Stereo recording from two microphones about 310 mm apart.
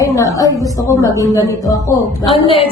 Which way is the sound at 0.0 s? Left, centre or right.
Centre.